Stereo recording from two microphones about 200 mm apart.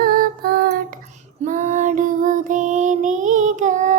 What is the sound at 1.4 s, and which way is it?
Child singing, 40° right (ahead or behind).